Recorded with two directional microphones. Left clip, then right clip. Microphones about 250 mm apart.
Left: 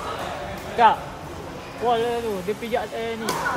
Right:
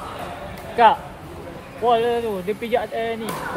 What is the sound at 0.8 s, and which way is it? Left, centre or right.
A man's voice, right.